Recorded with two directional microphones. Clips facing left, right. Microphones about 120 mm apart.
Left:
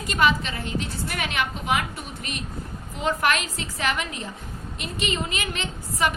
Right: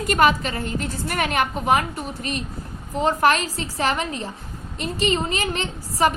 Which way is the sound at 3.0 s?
35° right (ahead or behind).